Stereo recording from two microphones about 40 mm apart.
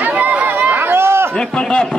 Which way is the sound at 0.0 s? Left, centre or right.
Right.